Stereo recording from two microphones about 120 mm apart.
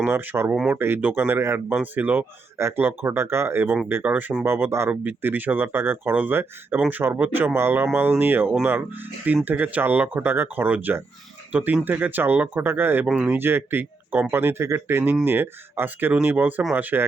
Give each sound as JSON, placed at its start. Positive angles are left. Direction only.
{"t": 0.0, "sound": "speech", "side_deg": -10}
{"t": 0.5, "sound": "speech", "side_deg": -5}
{"t": 0.8, "sound": "speech", "side_deg": -15}